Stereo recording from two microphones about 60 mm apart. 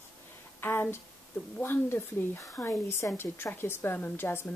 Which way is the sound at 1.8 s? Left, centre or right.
Left.